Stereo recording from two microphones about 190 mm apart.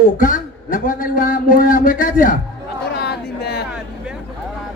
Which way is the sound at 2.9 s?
60° left (ahead or behind).